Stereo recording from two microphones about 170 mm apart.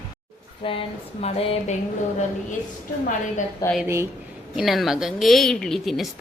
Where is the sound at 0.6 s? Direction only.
35° left (ahead or behind).